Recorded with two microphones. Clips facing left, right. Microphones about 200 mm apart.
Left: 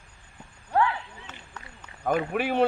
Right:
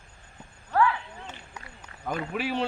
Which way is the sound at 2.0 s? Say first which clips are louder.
Left 5 dB; 55° left (ahead or behind).